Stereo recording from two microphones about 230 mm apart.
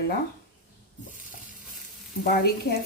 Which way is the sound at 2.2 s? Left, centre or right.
Left.